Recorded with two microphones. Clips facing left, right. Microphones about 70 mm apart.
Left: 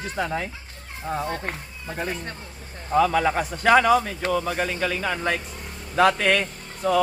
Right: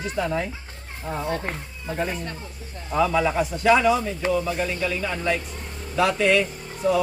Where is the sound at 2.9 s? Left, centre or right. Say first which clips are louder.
Left 1 dB; left.